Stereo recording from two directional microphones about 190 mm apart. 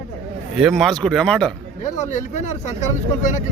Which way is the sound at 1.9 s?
40° left (ahead or behind).